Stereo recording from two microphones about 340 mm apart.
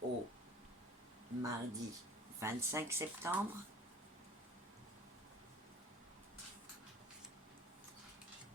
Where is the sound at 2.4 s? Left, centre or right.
Centre.